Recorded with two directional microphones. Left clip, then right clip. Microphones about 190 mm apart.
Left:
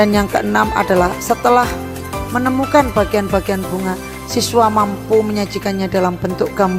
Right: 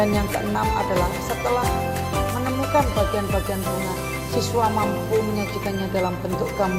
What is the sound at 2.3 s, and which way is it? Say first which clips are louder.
Speech: left 9 dB; 45° left (ahead or behind).